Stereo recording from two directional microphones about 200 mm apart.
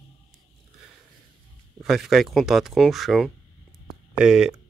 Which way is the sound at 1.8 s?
Centre (ahead or behind).